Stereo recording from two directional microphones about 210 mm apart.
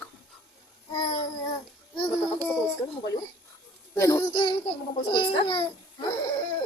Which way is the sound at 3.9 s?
15° left (ahead or behind).